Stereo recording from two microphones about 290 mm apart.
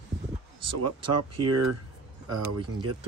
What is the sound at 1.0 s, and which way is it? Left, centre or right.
Speech, right.